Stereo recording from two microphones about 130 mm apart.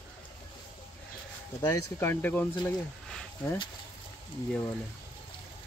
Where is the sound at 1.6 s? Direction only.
25° left (ahead or behind).